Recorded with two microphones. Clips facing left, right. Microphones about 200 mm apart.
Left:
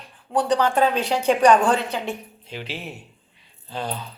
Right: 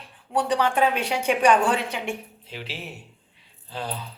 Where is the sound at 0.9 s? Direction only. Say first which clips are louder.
Left 3 dB; 10° right (ahead or behind).